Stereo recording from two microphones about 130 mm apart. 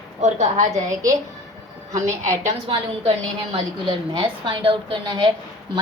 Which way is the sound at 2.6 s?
45° right (ahead or behind).